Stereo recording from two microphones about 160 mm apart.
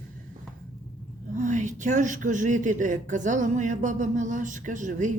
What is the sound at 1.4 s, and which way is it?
Speech, 50° right (ahead or behind).